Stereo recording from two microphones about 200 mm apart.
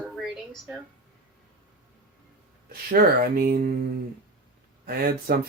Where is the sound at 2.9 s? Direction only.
50° right (ahead or behind).